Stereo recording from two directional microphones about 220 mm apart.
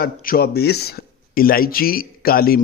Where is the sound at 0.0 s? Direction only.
40° left (ahead or behind).